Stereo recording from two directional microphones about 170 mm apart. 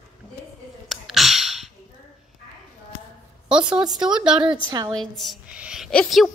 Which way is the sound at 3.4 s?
5° right (ahead or behind).